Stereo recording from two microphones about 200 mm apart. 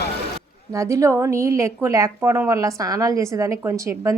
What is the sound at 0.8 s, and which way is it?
A woman's voice, 15° right (ahead or behind).